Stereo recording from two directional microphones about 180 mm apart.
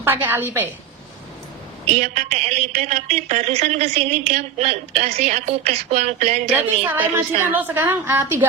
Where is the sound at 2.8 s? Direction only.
40° right (ahead or behind).